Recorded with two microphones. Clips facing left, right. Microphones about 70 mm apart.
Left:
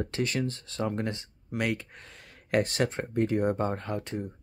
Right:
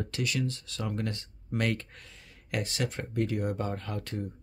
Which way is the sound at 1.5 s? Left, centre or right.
Centre.